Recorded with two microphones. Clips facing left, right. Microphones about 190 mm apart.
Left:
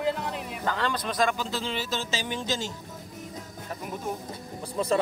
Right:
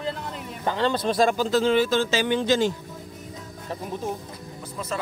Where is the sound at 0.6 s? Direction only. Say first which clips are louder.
Right 6 dB; 25° right (ahead or behind); by 2.7 s 60° right (ahead or behind).